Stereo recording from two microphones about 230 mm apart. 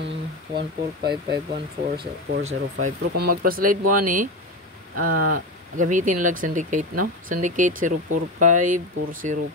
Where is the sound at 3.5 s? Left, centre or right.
Right.